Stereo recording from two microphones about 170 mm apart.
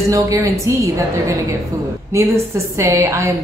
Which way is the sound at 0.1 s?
20° right (ahead or behind).